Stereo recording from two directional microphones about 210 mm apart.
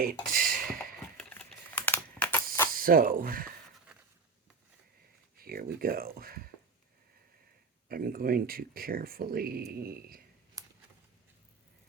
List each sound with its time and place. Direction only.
0.0 s a sound: 45° right (ahead or behind)
1.1 s typing: 5° left (ahead or behind)
2.7 s speech: 40° right (ahead or behind)
5.4 s speech: 45° right (ahead or behind)
7.9 s speech: 45° right (ahead or behind)
10.6 s a sound: 15° right (ahead or behind)